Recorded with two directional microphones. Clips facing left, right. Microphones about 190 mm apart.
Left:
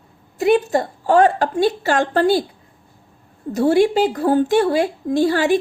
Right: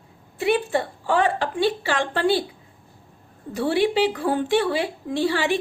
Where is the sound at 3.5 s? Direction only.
45° left (ahead or behind).